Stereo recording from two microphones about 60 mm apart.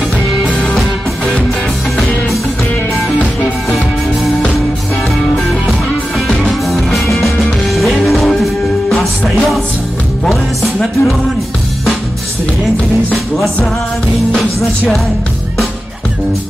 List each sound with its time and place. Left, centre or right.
0.6 s music: centre
6.1 s music: centre
8.8 s music: centre
10.2 s music: centre